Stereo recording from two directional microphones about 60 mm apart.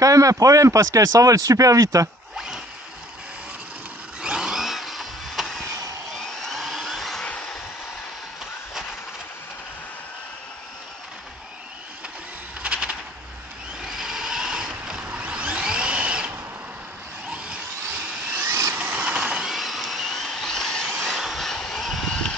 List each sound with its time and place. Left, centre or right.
0.0 s speech: right
2.3 s zipper: centre
4.2 s vehicle: centre
6.4 s a sound: centre
7.2 s vehicle: left
12.6 s a sound: centre
13.7 s vehicle: centre
17.3 s vehicle: centre
18.3 s vehicle: right
18.7 s a sound: right
19.1 s vehicle: centre
19.5 s vehicle: centre